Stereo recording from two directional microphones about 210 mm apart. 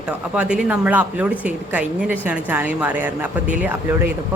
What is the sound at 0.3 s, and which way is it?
Speech, 5° right (ahead or behind).